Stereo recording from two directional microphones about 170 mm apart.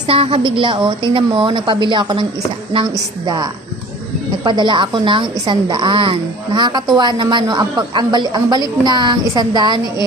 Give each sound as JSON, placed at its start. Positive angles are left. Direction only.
{"t": 0.1, "sound": "a woman's voice", "side_deg": -35}
{"t": 3.2, "sound": "a woman's voice", "side_deg": -25}